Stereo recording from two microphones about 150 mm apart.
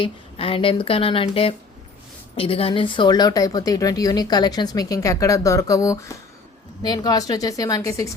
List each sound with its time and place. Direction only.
0.0 s speech: 35° left (ahead or behind); by 8.1 s 20° left (ahead or behind)